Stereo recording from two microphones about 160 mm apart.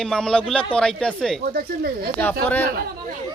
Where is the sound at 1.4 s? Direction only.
70° right (ahead or behind).